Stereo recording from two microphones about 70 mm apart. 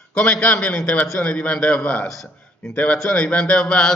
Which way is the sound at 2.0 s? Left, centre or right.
Centre.